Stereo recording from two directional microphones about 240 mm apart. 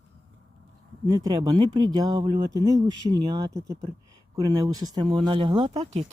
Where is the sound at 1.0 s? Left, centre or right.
Centre.